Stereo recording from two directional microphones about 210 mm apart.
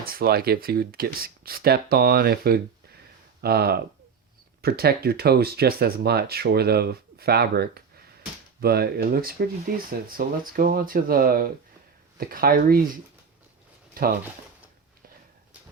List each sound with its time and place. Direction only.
0.0 s speech: 45° right (ahead or behind)
14.0 s speech: 40° right (ahead or behind)